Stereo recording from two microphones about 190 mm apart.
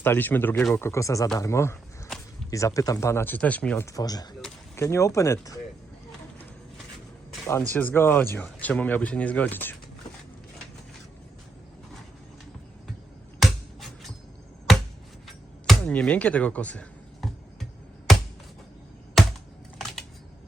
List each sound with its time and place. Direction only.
0.0 s speech: 10° left (ahead or behind)
3.9 s speech: 20° left (ahead or behind)
7.4 s speech: 10° left (ahead or behind)
13.4 s finger snapping: centre (ahead or behind)
15.8 s a sound: 5° left (ahead or behind)